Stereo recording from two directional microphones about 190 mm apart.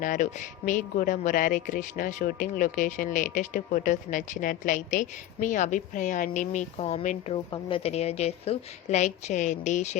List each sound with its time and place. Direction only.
0.0 s a woman's voice: 40° left (ahead or behind)